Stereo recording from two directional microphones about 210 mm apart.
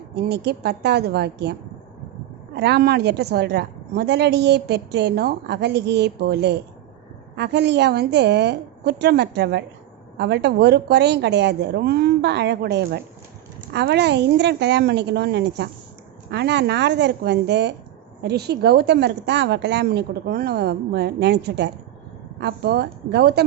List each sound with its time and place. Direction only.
0.2 s a woman's voice: 50° right (ahead or behind)
2.6 s a woman's voice: 50° right (ahead or behind)